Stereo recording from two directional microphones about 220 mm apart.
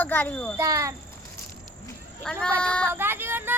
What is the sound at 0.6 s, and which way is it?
Speech, 15° right (ahead or behind).